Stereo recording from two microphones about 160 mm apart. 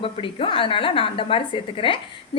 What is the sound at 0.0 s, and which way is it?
A woman's voice, 35° left (ahead or behind).